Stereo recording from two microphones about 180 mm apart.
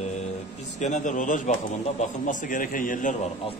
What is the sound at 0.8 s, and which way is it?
A man's voice, 40° left (ahead or behind).